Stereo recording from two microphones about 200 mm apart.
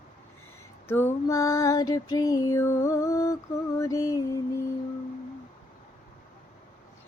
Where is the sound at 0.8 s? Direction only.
10° left (ahead or behind).